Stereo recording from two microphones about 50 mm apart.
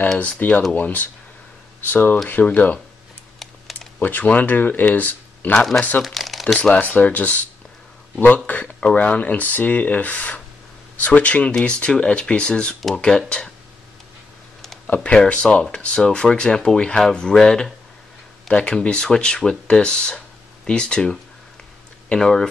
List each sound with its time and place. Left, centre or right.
0.2 s speech: left
3.3 s typing: centre
4.0 s speech: left
6.0 s shuffling cards: centre
6.7 s speech: left; by 13.2 s centre
15.0 s speech: left